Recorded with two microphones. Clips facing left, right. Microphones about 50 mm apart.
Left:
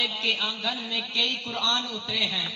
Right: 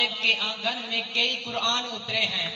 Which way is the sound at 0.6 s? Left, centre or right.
Right.